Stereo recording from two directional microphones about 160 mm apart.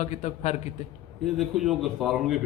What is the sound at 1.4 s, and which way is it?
A man's voice, centre (ahead or behind).